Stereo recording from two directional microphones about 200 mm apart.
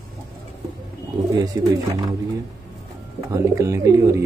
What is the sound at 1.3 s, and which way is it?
Speech, 20° right (ahead or behind).